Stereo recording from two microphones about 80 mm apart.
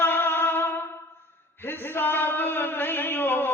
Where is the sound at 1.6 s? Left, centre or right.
Left.